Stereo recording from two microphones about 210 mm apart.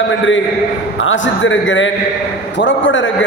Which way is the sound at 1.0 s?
65° left (ahead or behind).